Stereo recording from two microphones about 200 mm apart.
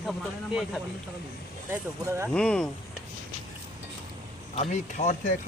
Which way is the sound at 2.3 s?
5° left (ahead or behind).